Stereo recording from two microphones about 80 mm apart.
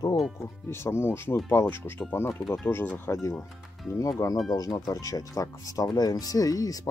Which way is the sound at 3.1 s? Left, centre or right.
Left.